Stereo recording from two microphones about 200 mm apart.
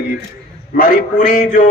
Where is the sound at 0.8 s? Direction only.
45° left (ahead or behind).